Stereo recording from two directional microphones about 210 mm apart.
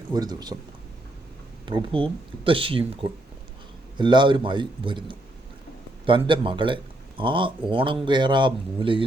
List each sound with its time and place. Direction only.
0.1 s speech: 20° right (ahead or behind)
1.6 s speech: 25° right (ahead or behind)